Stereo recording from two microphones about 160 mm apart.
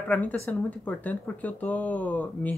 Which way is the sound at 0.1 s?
10° left (ahead or behind).